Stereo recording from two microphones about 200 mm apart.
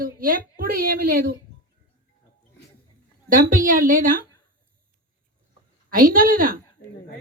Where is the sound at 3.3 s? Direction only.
45° right (ahead or behind).